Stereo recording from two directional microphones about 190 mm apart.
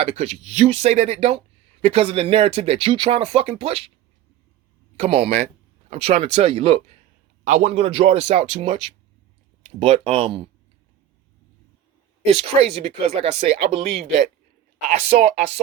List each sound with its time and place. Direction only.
0.0 s speech: 35° right (ahead or behind)
4.9 s speech: 30° right (ahead or behind)
12.2 s speech: 30° right (ahead or behind)
14.8 s speech: 40° right (ahead or behind)